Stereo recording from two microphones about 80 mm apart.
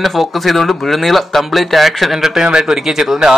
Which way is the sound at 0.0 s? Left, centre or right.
Centre.